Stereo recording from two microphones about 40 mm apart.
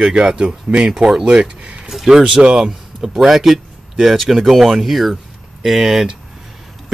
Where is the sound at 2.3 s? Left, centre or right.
Centre.